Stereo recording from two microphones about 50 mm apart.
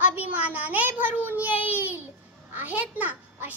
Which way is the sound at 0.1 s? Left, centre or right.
Right.